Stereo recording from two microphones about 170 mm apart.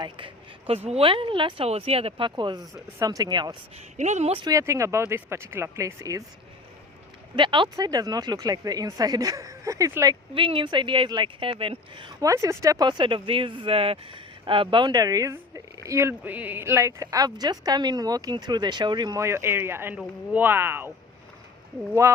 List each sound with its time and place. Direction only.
0.9 s speech: 35° right (ahead or behind)
3.9 s speech: 45° right (ahead or behind)
4.4 s speech: 20° right (ahead or behind)
7.3 s speech: 30° right (ahead or behind)
10.3 s a woman's voice: 30° right (ahead or behind); by 20.9 s 15° right (ahead or behind)